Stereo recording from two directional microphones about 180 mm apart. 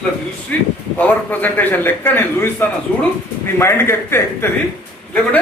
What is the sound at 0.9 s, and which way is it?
Speech, 10° left (ahead or behind).